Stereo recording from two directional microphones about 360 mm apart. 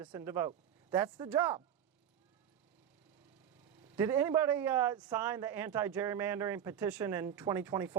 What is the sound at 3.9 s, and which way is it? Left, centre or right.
A man's voice, centre.